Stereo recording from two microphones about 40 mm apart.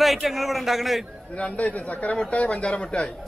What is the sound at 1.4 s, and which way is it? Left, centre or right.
A man's voice, left.